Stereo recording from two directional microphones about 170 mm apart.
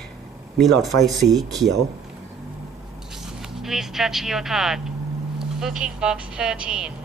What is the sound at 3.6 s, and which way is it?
Speech, centre (ahead or behind).